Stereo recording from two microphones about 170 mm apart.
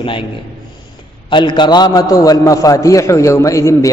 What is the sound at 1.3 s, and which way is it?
A man's voice, 25° left (ahead or behind).